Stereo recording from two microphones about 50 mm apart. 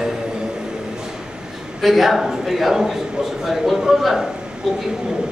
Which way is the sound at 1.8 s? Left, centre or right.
Centre.